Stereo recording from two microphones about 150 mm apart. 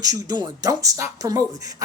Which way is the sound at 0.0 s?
25° right (ahead or behind).